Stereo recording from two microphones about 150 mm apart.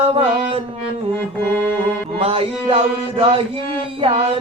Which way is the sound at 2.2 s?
40° right (ahead or behind).